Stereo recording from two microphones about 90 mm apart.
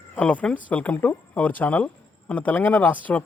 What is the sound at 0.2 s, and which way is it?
Speech, 15° left (ahead or behind).